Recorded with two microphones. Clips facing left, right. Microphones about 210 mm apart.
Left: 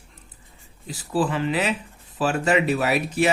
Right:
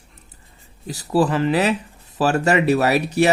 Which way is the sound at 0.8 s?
40° right (ahead or behind).